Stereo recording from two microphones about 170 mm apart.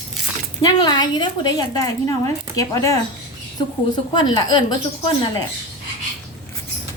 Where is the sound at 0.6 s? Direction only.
25° left (ahead or behind).